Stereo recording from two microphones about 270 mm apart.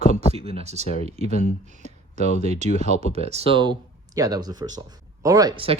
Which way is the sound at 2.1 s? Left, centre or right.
Left.